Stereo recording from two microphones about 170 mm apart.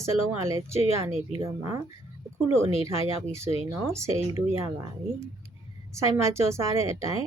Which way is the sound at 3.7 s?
15° right (ahead or behind).